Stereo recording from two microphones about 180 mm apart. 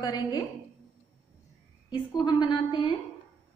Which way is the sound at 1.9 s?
25° left (ahead or behind).